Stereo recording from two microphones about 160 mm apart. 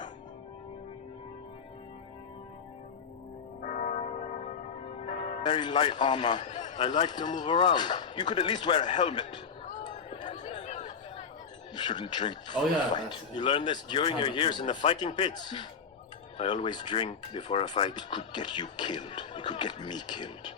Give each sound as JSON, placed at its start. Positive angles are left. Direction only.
{"t": 3.6, "sound": "church bell", "side_deg": 50}
{"t": 5.4, "sound": "speech", "side_deg": 30}
{"t": 6.4, "sound": "a sound", "side_deg": 50}
{"t": 6.7, "sound": "speech", "side_deg": 35}
{"t": 9.8, "sound": "chatter", "side_deg": 30}
{"t": 10.2, "sound": "a sound", "side_deg": 50}
{"t": 11.7, "sound": "speech", "side_deg": 25}